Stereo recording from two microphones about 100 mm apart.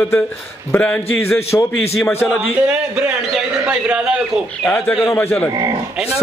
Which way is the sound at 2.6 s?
10° right (ahead or behind).